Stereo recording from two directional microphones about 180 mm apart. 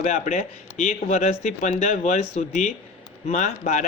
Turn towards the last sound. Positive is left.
turn(degrees=40)  # may be behind; listen again after turning